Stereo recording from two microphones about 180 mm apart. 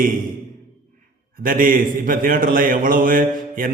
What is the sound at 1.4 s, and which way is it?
A man's voice, 50° right (ahead or behind).